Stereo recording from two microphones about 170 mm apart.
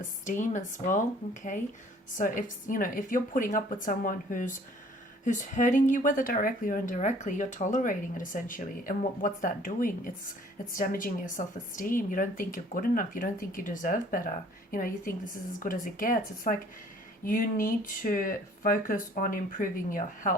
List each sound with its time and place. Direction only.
0.3 s speech: 45° left (ahead or behind)